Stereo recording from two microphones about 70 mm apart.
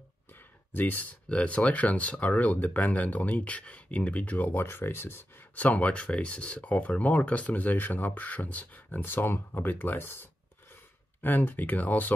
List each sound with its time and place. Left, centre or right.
0.7 s speech: left
4.6 s speech: left
5.6 s speech: left
11.2 s speech: left